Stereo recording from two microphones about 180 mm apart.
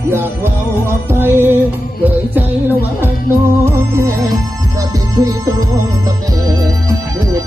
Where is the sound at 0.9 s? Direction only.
15° right (ahead or behind).